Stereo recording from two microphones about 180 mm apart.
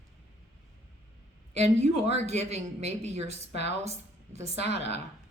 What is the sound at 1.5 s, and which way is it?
A woman's voice, 35° right (ahead or behind).